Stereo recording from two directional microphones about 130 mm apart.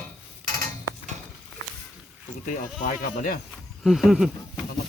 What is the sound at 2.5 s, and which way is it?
Speech, 90° left.